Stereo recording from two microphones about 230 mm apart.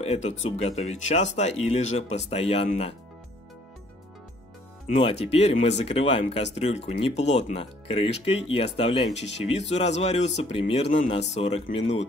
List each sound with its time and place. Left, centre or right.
0.0 s speech: left
4.8 s speech: left